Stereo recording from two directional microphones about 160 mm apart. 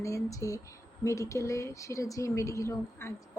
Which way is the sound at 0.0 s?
20° left (ahead or behind).